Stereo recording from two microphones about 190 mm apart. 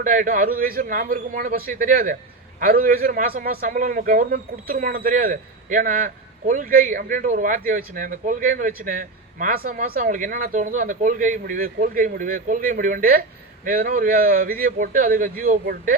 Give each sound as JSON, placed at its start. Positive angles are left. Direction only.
{"t": 0.0, "sound": "speech", "side_deg": -45}